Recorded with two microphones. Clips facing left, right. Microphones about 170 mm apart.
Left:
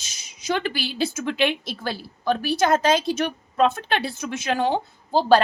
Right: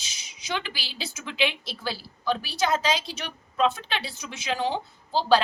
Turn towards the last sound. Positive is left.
turn(degrees=50)  # may be behind; listen again after turning